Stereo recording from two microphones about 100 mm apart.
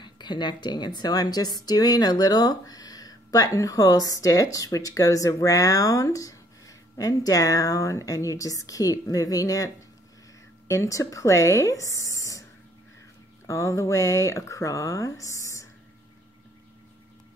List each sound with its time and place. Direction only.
0.0 s a woman's voice: 50° left (ahead or behind)
10.7 s a woman's voice: 30° left (ahead or behind)
13.5 s a woman's voice: 30° left (ahead or behind)